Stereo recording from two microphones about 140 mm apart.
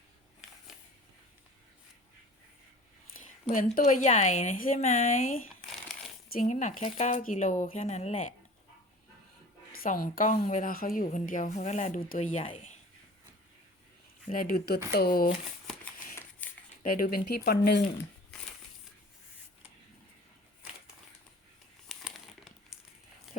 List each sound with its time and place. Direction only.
3.5 s a woman's voice: 75° left (ahead or behind)
4.8 s a woman's voice: 55° left (ahead or behind)
9.7 s a woman's voice: 85° left; by 12.5 s 60° left (ahead or behind)
14.3 s speech: 80° left
14.9 s speech: 90° left
16.4 s a sound: 10° left (ahead or behind)
16.8 s speech: 90° left
21.8 s crumpling: centre (ahead or behind)